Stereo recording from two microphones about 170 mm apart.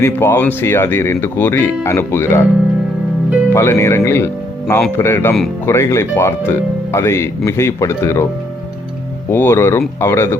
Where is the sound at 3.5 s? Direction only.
15° left (ahead or behind).